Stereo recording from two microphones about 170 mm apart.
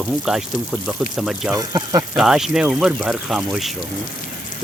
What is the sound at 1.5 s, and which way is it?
Speech, 20° right (ahead or behind).